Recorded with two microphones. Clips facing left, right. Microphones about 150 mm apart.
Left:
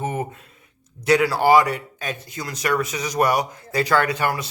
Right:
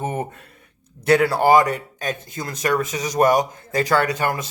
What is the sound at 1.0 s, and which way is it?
Speech, 55° right (ahead or behind).